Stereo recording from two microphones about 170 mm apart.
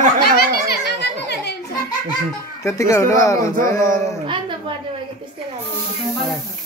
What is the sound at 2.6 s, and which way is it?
Speech, 20° left (ahead or behind).